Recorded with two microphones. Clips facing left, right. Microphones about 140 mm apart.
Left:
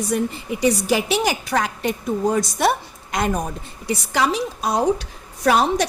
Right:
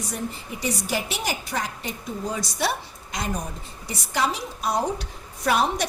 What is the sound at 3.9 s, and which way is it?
A woman's voice, 85° left.